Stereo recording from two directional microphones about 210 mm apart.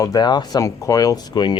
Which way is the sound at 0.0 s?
20° left (ahead or behind).